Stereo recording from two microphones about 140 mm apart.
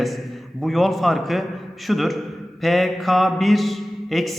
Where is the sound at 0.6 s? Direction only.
Centre (ahead or behind).